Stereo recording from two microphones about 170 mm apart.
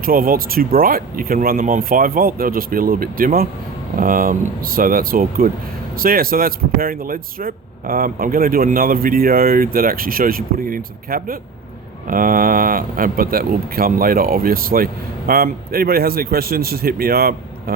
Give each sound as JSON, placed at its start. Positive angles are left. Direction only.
{"t": 0.0, "sound": "speech", "side_deg": -60}